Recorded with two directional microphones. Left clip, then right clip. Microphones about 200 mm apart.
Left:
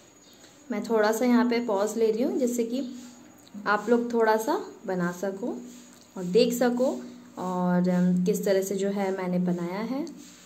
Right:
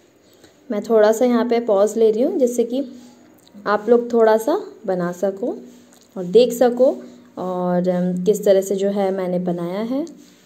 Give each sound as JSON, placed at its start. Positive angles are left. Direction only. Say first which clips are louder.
{"t": 0.7, "sound": "a woman's voice", "louder": "right 10 dB", "side_deg": -20}